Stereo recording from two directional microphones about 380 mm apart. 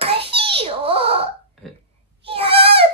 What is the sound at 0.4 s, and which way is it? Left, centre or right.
Wail, centre.